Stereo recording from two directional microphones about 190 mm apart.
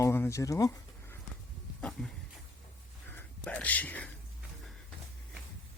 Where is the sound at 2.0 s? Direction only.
5° left (ahead or behind).